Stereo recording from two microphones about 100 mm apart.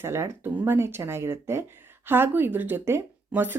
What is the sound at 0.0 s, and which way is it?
Speech, 25° right (ahead or behind).